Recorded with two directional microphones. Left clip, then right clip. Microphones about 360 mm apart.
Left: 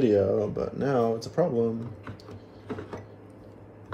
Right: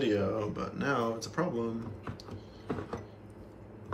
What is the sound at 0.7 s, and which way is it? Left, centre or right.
Speech, centre.